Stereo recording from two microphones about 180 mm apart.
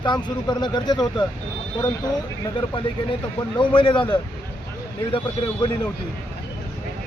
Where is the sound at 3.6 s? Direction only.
25° left (ahead or behind).